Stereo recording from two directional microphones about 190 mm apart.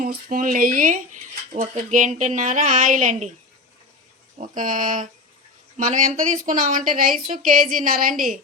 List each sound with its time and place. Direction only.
0.0 s a woman's voice: 45° right (ahead or behind)
4.4 s a woman's voice: 45° right (ahead or behind)